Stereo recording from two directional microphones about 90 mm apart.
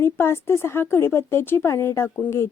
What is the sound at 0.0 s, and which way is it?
Speech, 25° left (ahead or behind).